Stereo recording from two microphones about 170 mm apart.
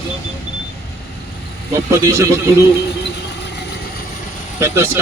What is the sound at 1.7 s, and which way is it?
Speech, 20° right (ahead or behind).